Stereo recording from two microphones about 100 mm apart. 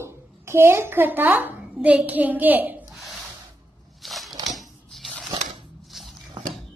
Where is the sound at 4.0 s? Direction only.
Centre (ahead or behind).